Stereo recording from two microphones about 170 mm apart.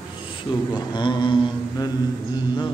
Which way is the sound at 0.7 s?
25° left (ahead or behind).